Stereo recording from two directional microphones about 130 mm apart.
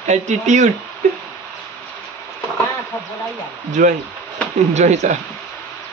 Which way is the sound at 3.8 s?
90° right.